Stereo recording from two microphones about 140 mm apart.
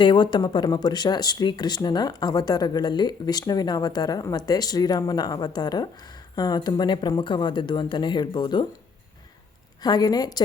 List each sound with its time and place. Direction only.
0.0 s speech: 35° left (ahead or behind)
9.8 s speech: 30° left (ahead or behind)